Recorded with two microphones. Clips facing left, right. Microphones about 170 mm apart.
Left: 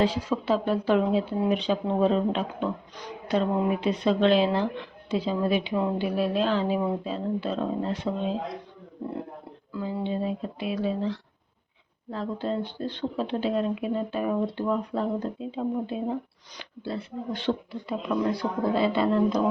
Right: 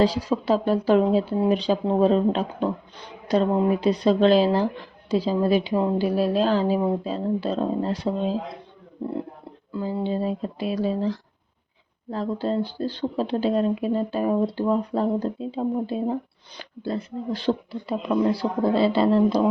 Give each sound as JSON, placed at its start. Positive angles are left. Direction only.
{"t": 0.0, "sound": "speech", "side_deg": -35}
{"t": 9.7, "sound": "speech", "side_deg": -35}